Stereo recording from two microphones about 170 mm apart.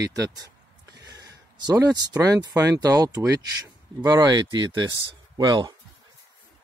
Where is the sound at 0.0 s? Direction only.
20° right (ahead or behind).